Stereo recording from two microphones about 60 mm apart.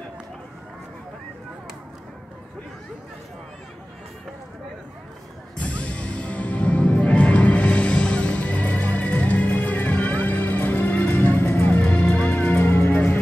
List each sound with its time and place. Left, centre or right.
5.6 s music: left
12.4 s music: left